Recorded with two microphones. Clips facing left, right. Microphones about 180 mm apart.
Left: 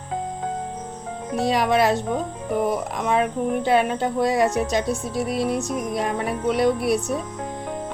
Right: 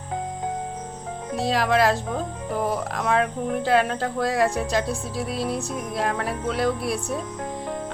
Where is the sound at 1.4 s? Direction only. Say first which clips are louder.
Left 1 dB; centre (ahead or behind).